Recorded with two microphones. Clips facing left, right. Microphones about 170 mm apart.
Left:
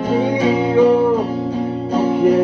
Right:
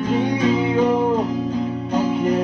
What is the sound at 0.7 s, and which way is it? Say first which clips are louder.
Music: left 5 dB; 10° left (ahead or behind).